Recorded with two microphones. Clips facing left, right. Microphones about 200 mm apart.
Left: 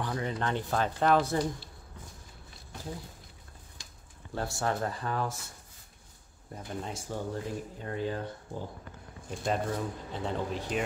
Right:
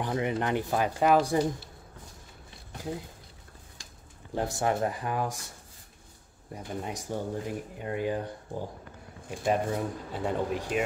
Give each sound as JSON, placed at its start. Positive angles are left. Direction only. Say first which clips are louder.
{"t": 0.0, "sound": "speech", "louder": "right 4 dB", "side_deg": -20}
{"t": 4.4, "sound": "speech", "louder": "right 4 dB", "side_deg": -15}
{"t": 6.5, "sound": "speech", "louder": "right 2 dB", "side_deg": -15}